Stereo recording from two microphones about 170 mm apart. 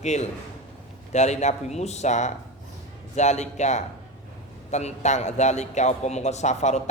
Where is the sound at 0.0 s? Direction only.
40° left (ahead or behind).